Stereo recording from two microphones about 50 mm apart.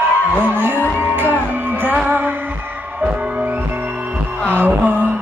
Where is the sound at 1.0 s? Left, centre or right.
Right.